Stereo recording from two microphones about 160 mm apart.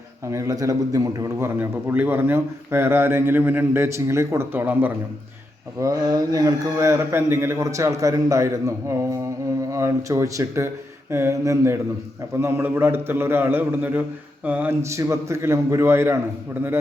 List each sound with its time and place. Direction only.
0.3 s a man's voice: 20° right (ahead or behind)
5.8 s a man's voice: 20° right (ahead or behind)